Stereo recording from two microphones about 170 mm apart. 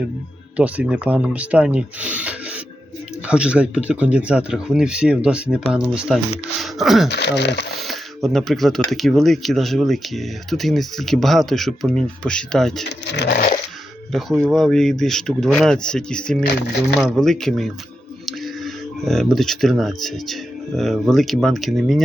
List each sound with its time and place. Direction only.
0.5 s speech: 10° right (ahead or behind)
7.1 s speech: 80° left
7.8 s speech: centre (ahead or behind)
13.1 s a sound: 90° left
14.1 s speech: centre (ahead or behind)